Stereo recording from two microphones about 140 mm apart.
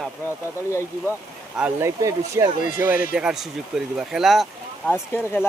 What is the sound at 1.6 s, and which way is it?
Speech, 10° right (ahead or behind).